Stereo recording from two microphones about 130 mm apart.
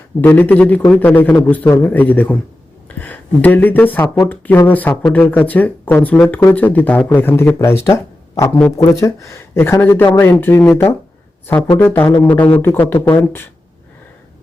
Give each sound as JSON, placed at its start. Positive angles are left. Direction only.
{"t": 0.2, "sound": "speech", "side_deg": 15}
{"t": 11.8, "sound": "speech", "side_deg": 20}